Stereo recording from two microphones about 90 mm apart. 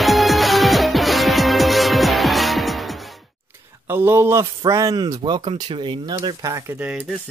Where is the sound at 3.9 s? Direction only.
25° right (ahead or behind).